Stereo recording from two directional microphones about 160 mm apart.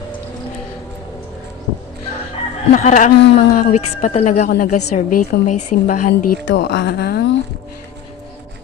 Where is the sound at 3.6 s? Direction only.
50° left (ahead or behind).